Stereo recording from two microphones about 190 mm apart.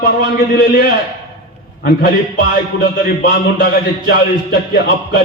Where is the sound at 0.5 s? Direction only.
55° left (ahead or behind).